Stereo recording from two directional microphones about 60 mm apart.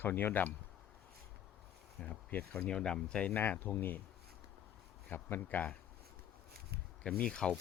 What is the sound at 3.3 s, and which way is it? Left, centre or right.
Speech, left.